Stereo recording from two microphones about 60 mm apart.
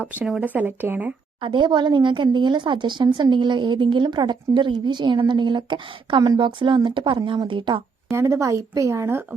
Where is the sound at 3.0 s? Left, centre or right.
Right.